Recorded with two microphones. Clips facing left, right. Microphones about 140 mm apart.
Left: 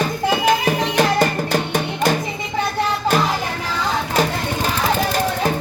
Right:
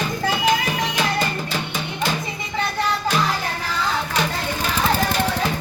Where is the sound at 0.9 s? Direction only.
60° left (ahead or behind).